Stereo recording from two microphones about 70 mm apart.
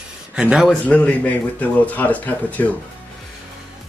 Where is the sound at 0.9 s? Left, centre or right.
Centre.